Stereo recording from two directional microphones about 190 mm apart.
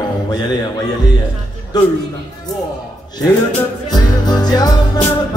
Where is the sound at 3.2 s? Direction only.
20° left (ahead or behind).